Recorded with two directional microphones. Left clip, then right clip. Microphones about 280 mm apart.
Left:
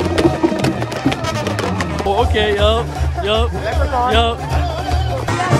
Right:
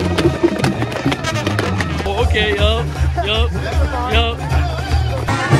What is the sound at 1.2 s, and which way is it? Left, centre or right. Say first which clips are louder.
Music: even; left.